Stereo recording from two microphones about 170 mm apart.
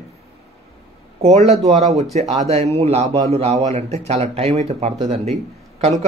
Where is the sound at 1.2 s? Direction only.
40° right (ahead or behind).